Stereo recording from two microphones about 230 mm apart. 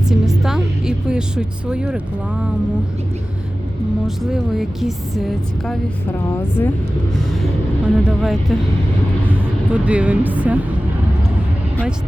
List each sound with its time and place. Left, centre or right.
0.1 s music: centre
4.0 s speech: centre
7.9 s speech: centre